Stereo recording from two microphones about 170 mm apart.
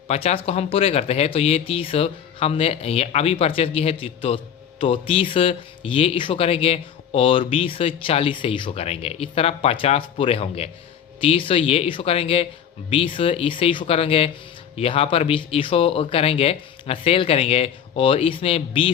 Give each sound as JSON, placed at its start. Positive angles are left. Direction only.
{"t": 0.1, "sound": "speech", "side_deg": 35}